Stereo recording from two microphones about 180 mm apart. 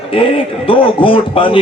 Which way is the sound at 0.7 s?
30° left (ahead or behind).